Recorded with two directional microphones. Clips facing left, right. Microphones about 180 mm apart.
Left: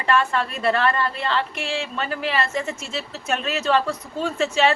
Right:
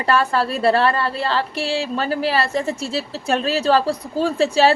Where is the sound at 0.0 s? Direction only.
35° right (ahead or behind).